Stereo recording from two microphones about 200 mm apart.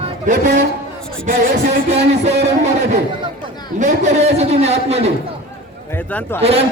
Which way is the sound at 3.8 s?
35° right (ahead or behind).